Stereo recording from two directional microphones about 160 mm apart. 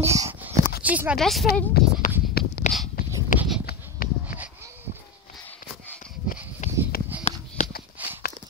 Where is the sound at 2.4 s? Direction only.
75° left (ahead or behind).